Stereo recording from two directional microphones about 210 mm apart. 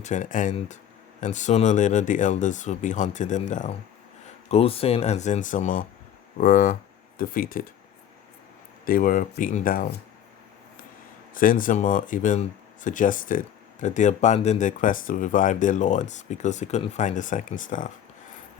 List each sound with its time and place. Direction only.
0.0 s speech: 35° left (ahead or behind)
8.8 s speech: 40° left (ahead or behind)
11.3 s speech: 40° left (ahead or behind)